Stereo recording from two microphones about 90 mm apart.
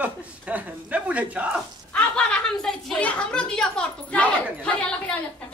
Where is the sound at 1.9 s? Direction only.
10° left (ahead or behind).